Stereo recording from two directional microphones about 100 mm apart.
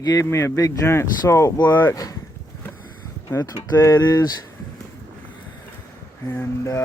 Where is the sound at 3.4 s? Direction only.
40° left (ahead or behind).